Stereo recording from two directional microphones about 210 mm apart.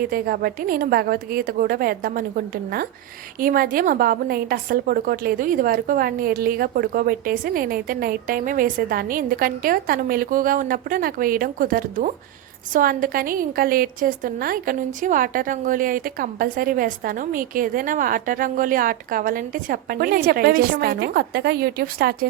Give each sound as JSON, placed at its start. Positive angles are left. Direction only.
{"t": 0.0, "sound": "a woman's voice", "side_deg": -45}